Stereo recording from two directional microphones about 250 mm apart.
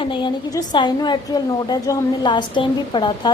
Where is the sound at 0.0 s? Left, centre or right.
Centre.